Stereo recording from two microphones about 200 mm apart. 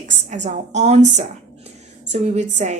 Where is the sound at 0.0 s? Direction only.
35° right (ahead or behind).